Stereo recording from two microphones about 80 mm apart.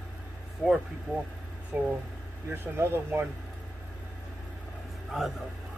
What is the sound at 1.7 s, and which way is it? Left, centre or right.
Speech, right.